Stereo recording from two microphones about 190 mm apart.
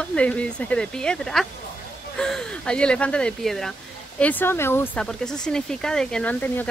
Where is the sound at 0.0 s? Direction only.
5° left (ahead or behind).